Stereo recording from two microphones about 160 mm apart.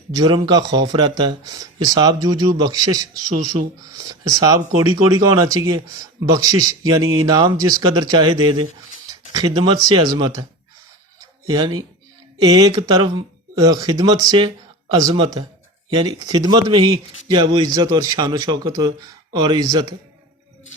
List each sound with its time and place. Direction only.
0.1 s speech: 25° right (ahead or behind)
11.4 s speech: 25° right (ahead or behind)